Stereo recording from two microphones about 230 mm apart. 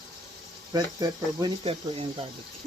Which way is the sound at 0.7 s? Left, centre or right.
Centre.